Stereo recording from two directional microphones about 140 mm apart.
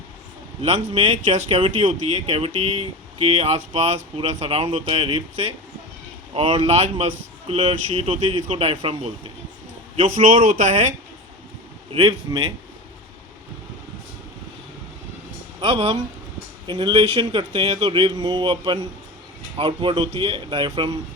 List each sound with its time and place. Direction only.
0.6 s a man's voice: 50° right (ahead or behind)
12.3 s a man's voice: 25° right (ahead or behind)
15.6 s speech: 45° right (ahead or behind)
17.8 s speech: 35° right (ahead or behind)